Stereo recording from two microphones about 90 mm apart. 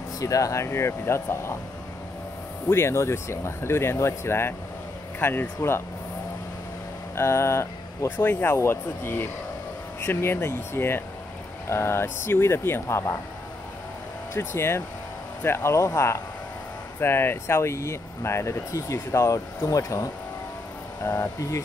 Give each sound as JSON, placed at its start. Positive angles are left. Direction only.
{"t": 0.2, "sound": "speech", "side_deg": 40}
{"t": 2.7, "sound": "speech", "side_deg": 30}
{"t": 7.2, "sound": "speech", "side_deg": 30}
{"t": 14.3, "sound": "speech", "side_deg": 30}